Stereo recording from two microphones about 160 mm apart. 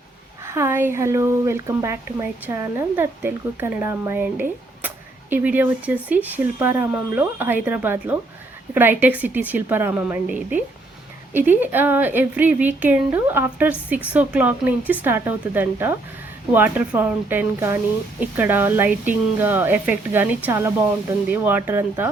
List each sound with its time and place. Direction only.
0.4 s speech: 15° right (ahead or behind)